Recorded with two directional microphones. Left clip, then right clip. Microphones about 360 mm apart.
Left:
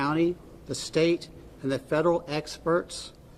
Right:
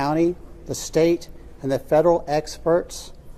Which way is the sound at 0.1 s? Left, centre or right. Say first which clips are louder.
Right 5 dB; centre.